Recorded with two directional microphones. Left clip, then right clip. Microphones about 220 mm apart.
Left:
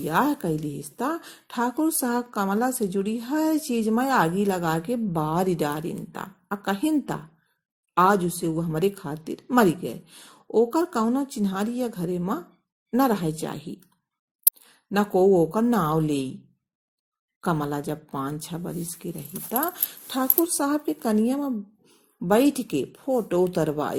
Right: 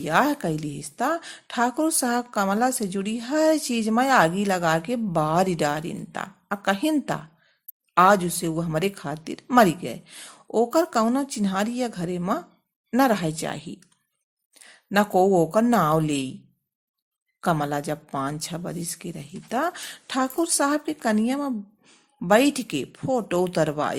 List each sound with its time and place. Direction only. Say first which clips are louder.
0.0 s a woman's voice: right 2 dB; 20° right (ahead or behind)
14.8 s a woman's voice: right 1 dB; 20° right (ahead or behind)
17.4 s a woman's voice: right 3 dB; 20° right (ahead or behind)